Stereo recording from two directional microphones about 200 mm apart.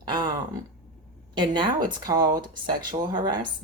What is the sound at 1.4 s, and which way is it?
Speech, 20° right (ahead or behind).